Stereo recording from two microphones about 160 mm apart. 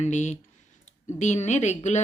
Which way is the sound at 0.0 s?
45° left (ahead or behind).